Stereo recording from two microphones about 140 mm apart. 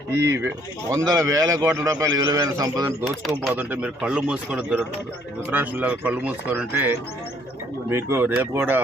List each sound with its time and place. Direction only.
0.2 s speech: 20° right (ahead or behind)
3.0 s speech: centre (ahead or behind)
3.5 s speech: 10° right (ahead or behind)